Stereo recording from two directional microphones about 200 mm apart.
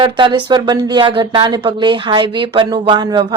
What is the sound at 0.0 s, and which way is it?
Speech, 25° right (ahead or behind).